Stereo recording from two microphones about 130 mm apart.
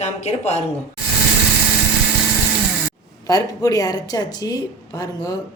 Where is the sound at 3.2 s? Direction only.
25° left (ahead or behind).